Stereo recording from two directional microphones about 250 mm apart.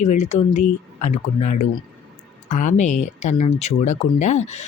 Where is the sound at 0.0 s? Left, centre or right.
Left.